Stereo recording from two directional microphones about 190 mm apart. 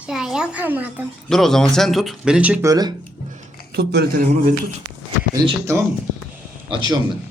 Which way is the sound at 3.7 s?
60° right (ahead or behind).